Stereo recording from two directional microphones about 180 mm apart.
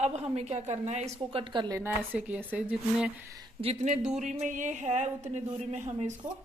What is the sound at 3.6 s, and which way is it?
A woman's voice, 40° right (ahead or behind).